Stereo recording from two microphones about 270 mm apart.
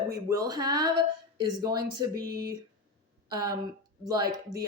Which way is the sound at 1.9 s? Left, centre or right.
Centre.